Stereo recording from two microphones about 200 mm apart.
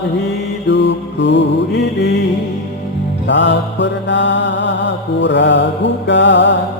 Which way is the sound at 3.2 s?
60° left (ahead or behind).